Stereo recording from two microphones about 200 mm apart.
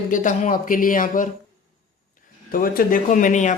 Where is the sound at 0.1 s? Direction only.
40° left (ahead or behind).